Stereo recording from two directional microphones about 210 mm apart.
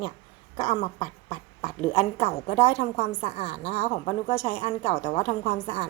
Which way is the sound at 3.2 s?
30° left (ahead or behind).